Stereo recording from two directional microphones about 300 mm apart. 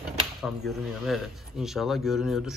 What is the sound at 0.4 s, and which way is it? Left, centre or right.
A man's voice, centre.